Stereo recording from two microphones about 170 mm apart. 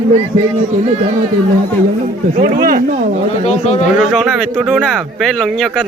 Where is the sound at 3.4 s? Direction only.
40° left (ahead or behind).